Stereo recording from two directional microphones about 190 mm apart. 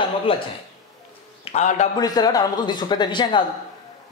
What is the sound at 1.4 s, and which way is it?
Speech, 35° left (ahead or behind).